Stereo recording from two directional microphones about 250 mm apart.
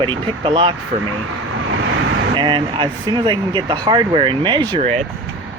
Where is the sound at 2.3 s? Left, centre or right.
Centre.